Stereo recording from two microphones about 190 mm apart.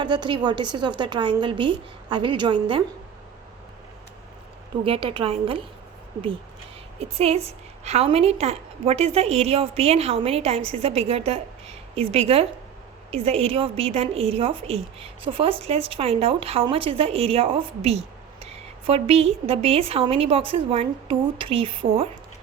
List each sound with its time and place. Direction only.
0.0 s a woman's voice: 25° right (ahead or behind)
4.8 s a woman's voice: 30° right (ahead or behind)
7.0 s a woman's voice: 30° right (ahead or behind)